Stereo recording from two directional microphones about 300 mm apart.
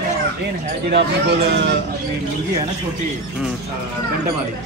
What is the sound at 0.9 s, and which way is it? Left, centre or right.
Speech, right.